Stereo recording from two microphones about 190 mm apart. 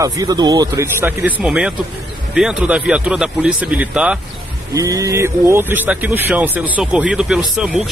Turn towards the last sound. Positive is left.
turn(degrees=-5)  # may be behind; listen again after turning